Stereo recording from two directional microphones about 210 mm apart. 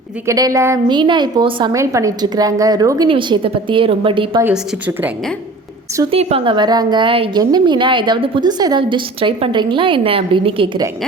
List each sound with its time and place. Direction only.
0.3 s a woman's voice: 15° right (ahead or behind)
4.4 s a woman's voice: 10° right (ahead or behind)
6.0 s a woman's voice: 25° right (ahead or behind)